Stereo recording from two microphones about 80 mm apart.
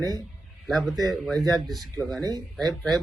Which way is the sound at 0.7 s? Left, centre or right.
Centre.